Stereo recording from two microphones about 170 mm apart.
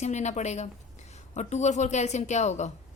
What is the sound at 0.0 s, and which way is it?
A woman's voice, 40° left (ahead or behind).